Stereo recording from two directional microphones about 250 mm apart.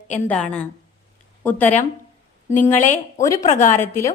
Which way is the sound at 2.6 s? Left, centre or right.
Left.